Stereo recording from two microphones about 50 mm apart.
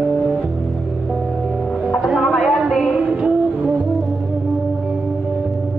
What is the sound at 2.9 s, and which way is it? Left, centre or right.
Music, right.